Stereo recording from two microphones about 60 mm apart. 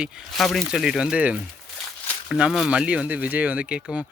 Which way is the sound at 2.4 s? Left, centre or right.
Centre.